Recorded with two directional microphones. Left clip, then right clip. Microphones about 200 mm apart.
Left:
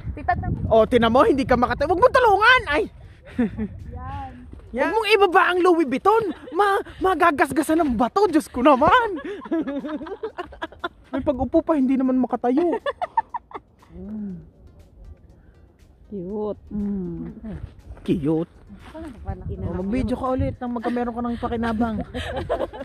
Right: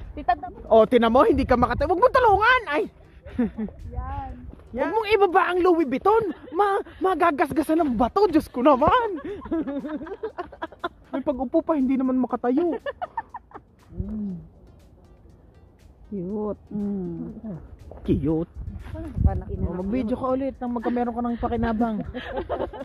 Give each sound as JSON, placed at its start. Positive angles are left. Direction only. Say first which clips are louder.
{"t": 0.1, "sound": "speech", "louder": "even", "side_deg": 15}
{"t": 0.7, "sound": "speech", "louder": "even", "side_deg": -5}
{"t": 0.9, "sound": "speech", "louder": "left 1 dB", "side_deg": 10}
{"t": 12.5, "sound": "a sound", "louder": "left 3 dB", "side_deg": 45}
{"t": 16.6, "sound": "speech", "louder": "left 1 dB", "side_deg": 0}
{"t": 18.0, "sound": "a sound", "louder": "left 2 dB", "side_deg": 15}
{"t": 19.9, "sound": "speech", "louder": "left 1 dB", "side_deg": 25}
{"t": 22.1, "sound": "speech", "louder": "left 3 dB", "side_deg": 65}